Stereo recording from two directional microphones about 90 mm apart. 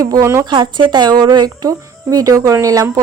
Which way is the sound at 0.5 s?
60° right (ahead or behind).